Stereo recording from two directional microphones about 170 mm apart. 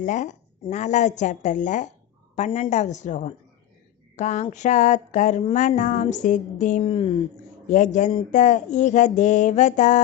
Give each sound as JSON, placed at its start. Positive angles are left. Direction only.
{"t": 0.0, "sound": "a woman's voice", "side_deg": 45}
{"t": 6.8, "sound": "speech", "side_deg": 30}
{"t": 7.7, "sound": "a woman's voice", "side_deg": 45}